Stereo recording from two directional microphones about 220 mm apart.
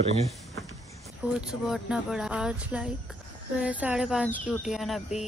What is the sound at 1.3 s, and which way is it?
Speech, 5° right (ahead or behind).